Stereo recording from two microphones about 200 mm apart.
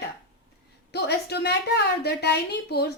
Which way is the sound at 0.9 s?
55° left (ahead or behind).